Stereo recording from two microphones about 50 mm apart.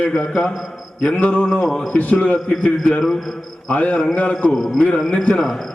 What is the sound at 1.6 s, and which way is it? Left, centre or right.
Speech, centre.